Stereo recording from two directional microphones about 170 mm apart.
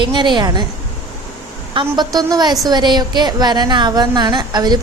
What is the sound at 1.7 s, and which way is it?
A woman's voice, 25° right (ahead or behind).